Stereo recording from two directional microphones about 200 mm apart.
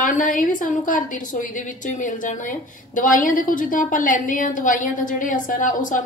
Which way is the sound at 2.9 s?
40° left (ahead or behind).